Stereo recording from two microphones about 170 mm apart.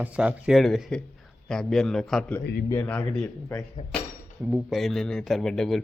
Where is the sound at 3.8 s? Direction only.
40° left (ahead or behind).